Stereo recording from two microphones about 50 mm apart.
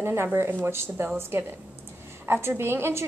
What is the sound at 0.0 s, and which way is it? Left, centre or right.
A woman's voice, right.